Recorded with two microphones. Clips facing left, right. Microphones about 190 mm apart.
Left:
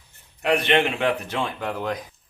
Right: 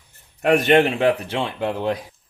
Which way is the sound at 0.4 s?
45° right (ahead or behind).